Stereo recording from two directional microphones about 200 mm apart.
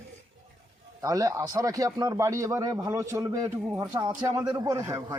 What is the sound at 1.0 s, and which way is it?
Speech, 15° right (ahead or behind).